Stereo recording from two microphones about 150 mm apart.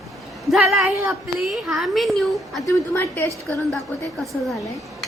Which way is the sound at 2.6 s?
15° left (ahead or behind).